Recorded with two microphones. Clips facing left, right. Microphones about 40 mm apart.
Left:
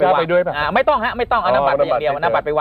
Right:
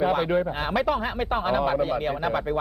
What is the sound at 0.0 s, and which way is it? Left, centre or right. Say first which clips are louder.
Speech: left 8 dB; left.